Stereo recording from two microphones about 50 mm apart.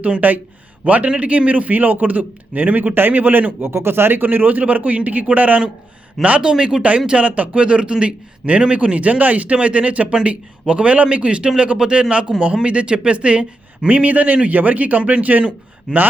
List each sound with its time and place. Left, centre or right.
0.0 s a man's voice: right
3.7 s a man's voice: right
6.4 s speech: centre
7.1 s a man's voice: right